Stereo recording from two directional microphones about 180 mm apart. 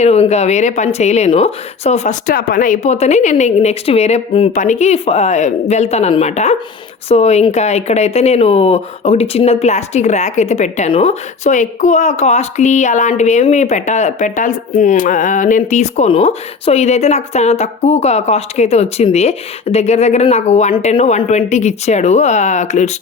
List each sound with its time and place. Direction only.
0.0 s speech: 35° left (ahead or behind)